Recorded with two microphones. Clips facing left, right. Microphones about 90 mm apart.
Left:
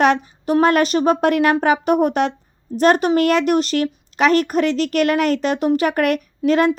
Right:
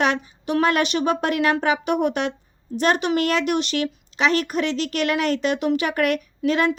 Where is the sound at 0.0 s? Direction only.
40° left (ahead or behind).